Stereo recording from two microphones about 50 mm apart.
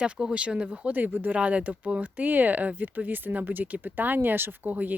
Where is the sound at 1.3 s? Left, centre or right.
Right.